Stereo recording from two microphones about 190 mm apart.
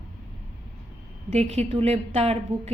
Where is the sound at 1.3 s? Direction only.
35° right (ahead or behind).